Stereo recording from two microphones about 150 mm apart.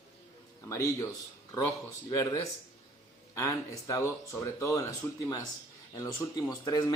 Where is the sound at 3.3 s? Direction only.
20° left (ahead or behind).